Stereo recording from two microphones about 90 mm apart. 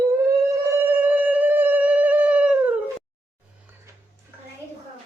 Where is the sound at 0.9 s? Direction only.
20° right (ahead or behind).